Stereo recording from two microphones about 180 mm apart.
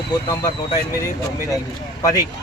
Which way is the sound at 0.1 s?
20° left (ahead or behind).